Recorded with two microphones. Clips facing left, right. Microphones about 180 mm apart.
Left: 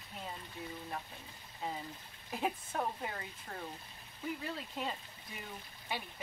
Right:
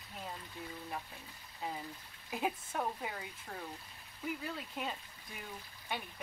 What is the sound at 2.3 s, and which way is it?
Speech, centre (ahead or behind).